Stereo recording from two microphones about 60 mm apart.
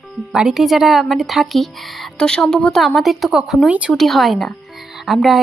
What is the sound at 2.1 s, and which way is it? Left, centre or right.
Speech, centre.